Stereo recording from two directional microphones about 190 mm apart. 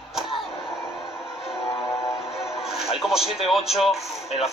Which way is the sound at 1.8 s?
Centre (ahead or behind).